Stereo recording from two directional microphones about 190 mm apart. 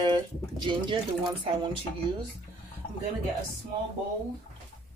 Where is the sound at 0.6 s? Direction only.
25° right (ahead or behind).